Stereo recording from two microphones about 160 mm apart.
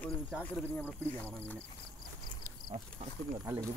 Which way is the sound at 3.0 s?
40° right (ahead or behind).